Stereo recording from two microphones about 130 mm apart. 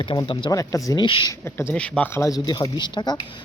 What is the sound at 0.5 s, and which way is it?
Speech, 25° left (ahead or behind).